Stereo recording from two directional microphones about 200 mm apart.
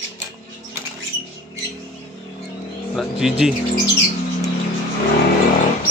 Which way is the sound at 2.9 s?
5° right (ahead or behind).